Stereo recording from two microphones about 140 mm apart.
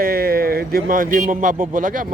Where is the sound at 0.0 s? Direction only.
90° right.